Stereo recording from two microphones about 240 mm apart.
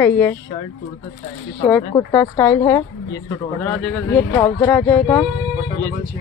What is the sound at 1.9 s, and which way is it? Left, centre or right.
Speech, centre.